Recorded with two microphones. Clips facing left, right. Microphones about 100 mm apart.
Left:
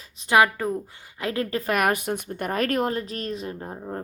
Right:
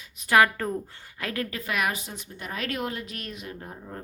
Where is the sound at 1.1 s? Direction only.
25° left (ahead or behind).